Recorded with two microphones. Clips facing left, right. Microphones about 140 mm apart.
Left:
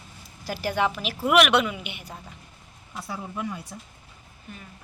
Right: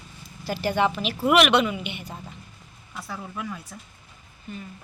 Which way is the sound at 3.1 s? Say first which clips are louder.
Left 2 dB; 20° left (ahead or behind).